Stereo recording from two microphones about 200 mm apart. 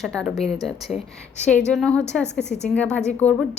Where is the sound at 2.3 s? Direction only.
60° left (ahead or behind).